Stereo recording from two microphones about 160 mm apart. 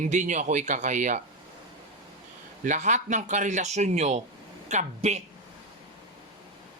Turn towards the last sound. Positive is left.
turn(degrees=-45)  # may be behind; listen again after turning